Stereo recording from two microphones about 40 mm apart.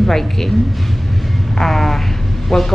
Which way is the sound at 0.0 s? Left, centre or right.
Centre.